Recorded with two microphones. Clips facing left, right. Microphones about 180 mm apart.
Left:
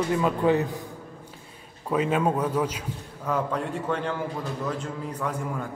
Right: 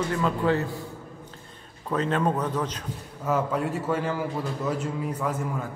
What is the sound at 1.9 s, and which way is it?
Speech, 10° left (ahead or behind).